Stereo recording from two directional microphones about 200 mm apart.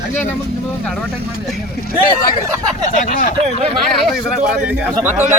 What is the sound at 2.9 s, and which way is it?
Speech, 40° left (ahead or behind).